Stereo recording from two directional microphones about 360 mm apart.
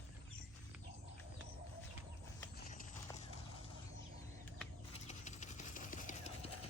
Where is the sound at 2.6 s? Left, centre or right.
Left.